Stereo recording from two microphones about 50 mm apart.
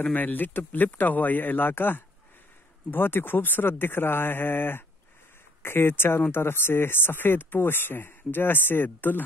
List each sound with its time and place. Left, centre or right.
0.1 s speech: left